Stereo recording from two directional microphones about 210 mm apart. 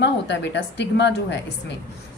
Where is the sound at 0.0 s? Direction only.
55° left (ahead or behind).